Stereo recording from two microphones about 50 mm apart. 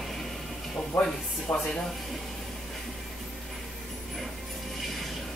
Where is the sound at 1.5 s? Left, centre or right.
Left.